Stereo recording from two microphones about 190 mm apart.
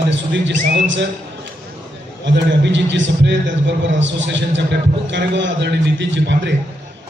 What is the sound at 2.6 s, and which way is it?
A man's voice, 70° right (ahead or behind).